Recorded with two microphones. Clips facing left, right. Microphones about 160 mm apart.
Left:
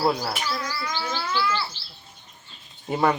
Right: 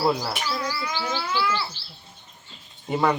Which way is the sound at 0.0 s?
10° left (ahead or behind).